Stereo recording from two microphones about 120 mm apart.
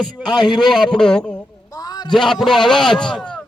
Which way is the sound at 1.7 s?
35° left (ahead or behind).